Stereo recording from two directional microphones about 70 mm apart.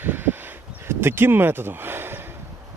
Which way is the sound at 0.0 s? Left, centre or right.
Right.